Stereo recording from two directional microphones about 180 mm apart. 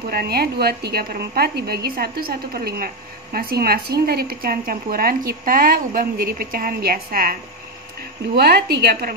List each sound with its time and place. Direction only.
0.1 s a woman's voice: 60° right (ahead or behind)
8.4 s a woman's voice: 60° right (ahead or behind)